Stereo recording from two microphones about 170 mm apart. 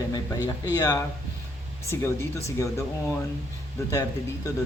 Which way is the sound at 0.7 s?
20° left (ahead or behind).